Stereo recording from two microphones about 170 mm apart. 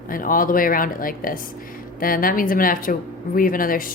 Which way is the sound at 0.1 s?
55° left (ahead or behind).